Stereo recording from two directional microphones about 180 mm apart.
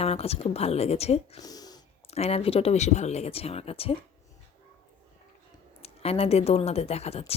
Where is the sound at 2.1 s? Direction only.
35° left (ahead or behind).